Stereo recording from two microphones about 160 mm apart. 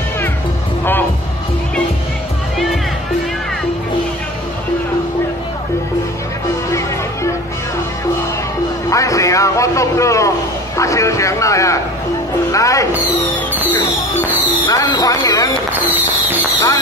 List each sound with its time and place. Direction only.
8.9 s a sound: 20° left (ahead or behind)
10.8 s a man's voice: 20° left (ahead or behind)
14.7 s a man's voice: 25° left (ahead or behind)